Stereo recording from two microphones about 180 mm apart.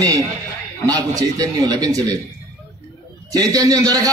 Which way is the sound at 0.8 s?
20° right (ahead or behind).